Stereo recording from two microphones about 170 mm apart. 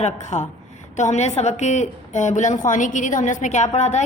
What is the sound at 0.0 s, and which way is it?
A woman's voice, 45° left (ahead or behind).